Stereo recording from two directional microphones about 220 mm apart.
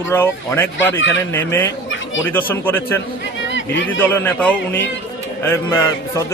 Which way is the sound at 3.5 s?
55° left (ahead or behind).